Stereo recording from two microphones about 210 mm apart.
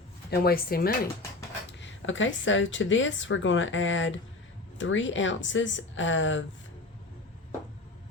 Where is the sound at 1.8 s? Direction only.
65° left (ahead or behind).